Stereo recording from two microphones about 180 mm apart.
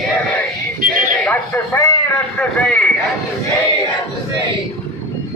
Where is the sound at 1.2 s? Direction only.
10° left (ahead or behind).